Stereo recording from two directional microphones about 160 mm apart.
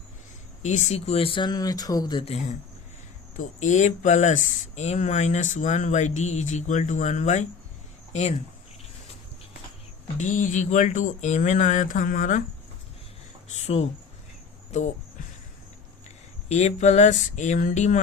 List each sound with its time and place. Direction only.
0.6 s speech: 45° left (ahead or behind); by 2.2 s 25° left (ahead or behind)
2.2 s speech: 40° left (ahead or behind)
10.2 s speech: 50° left (ahead or behind)
13.5 s speech: 40° left (ahead or behind)
16.0 s a sound: 45° left (ahead or behind)